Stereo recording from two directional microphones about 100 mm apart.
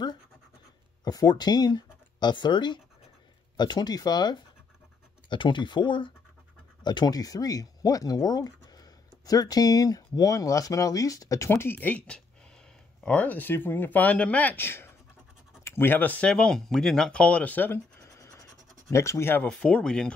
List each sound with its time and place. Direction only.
1.0 s speech: 40° left (ahead or behind); by 17.7 s 15° left (ahead or behind)
18.0 s scratch: 30° left (ahead or behind)
19.5 s speech: 10° left (ahead or behind)